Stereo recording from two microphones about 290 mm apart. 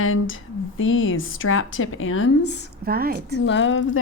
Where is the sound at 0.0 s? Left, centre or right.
Left.